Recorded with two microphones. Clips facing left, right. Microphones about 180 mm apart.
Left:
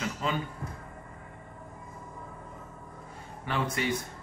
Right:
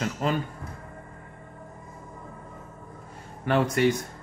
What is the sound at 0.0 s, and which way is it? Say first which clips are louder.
Music: right 5 dB; 50° right (ahead or behind).